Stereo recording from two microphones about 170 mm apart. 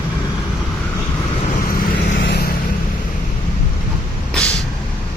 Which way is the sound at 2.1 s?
80° left.